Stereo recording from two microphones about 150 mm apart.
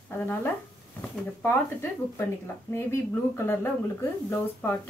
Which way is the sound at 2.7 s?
15° left (ahead or behind).